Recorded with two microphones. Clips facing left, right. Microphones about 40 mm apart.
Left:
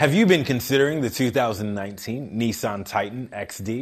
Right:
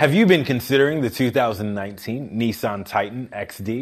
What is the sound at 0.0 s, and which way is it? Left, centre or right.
Speech, centre.